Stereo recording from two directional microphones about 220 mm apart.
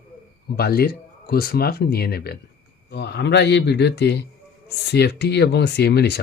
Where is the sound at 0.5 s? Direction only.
45° left (ahead or behind).